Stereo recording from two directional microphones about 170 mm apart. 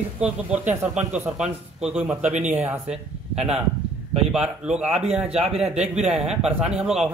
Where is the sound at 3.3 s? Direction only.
35° right (ahead or behind).